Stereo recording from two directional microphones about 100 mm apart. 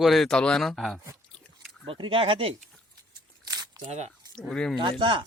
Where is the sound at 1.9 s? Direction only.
60° right (ahead or behind).